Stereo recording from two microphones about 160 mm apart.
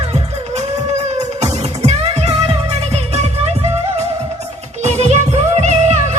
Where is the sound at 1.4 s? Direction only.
40° right (ahead or behind).